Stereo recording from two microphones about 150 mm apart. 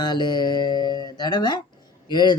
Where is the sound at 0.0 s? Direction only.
30° left (ahead or behind).